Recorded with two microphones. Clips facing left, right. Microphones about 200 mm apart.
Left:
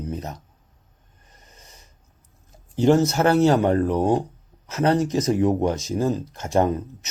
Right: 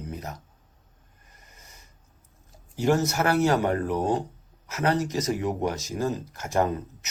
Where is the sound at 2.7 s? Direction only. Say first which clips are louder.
Left 6 dB; 20° left (ahead or behind).